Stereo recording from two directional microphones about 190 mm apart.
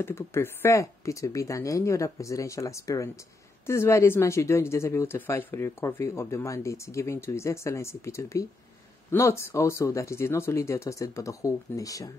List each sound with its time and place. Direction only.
0.0 s speech: 15° left (ahead or behind)